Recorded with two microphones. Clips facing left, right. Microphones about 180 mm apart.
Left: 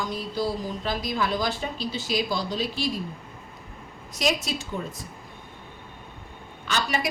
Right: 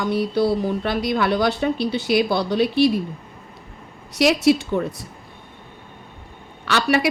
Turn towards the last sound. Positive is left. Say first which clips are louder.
# right 8 dB
turn(degrees=-70)  # may be behind; listen again after turning